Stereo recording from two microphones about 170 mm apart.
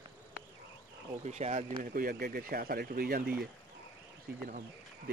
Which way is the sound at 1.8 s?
60° right (ahead or behind).